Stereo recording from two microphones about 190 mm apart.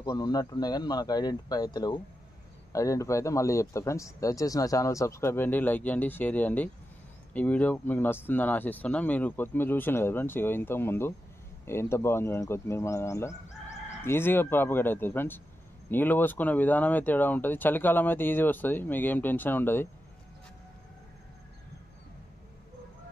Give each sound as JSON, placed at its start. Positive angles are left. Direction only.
{"t": 0.0, "sound": "speech", "side_deg": 20}